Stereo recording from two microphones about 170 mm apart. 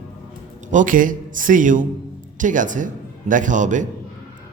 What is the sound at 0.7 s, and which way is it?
A man's voice, 50° right (ahead or behind).